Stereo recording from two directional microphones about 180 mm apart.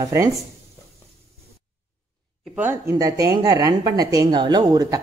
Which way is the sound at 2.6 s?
15° right (ahead or behind).